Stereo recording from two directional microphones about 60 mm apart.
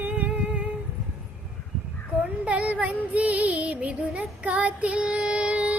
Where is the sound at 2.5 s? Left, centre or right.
Right.